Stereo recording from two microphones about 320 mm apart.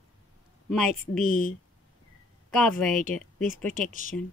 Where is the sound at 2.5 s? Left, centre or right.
Centre.